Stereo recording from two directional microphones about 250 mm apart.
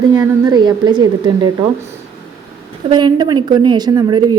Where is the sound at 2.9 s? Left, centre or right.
Centre.